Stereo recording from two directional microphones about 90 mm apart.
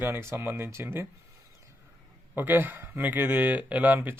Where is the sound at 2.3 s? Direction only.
20° right (ahead or behind).